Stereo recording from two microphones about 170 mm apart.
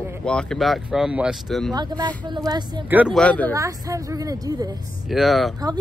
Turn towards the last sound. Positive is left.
turn(degrees=0)  # may be behind; listen again after turning